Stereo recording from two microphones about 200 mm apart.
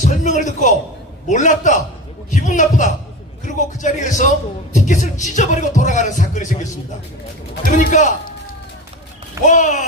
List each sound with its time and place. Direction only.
0.0 s a man's voice: 40° left (ahead or behind)
9.5 s speech: 40° left (ahead or behind)